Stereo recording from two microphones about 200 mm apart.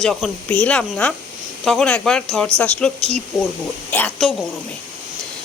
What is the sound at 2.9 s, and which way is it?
Speech, 35° right (ahead or behind).